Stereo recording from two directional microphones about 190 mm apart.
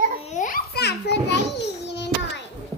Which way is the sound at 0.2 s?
35° left (ahead or behind).